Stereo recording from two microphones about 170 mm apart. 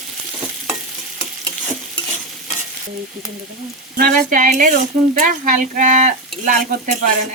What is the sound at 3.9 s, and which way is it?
Speech, 55° right (ahead or behind).